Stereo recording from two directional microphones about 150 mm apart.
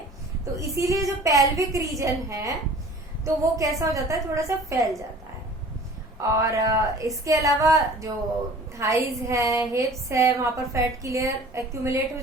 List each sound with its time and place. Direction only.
0.6 s a woman's voice: 20° right (ahead or behind)
6.2 s a woman's voice: 25° right (ahead or behind)